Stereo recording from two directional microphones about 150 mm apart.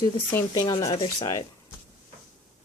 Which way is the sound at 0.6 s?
30° left (ahead or behind).